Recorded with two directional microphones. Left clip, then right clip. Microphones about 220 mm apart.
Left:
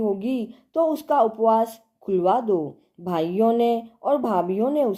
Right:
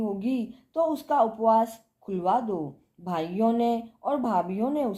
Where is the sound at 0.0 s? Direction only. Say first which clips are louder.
Left 5 dB; 35° left (ahead or behind).